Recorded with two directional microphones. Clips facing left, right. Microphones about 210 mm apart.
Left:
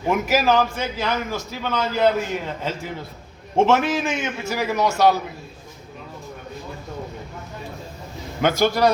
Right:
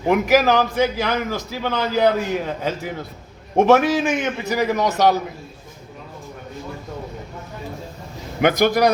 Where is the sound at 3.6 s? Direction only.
15° right (ahead or behind).